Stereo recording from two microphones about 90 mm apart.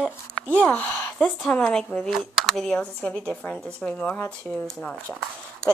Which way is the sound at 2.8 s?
15° left (ahead or behind).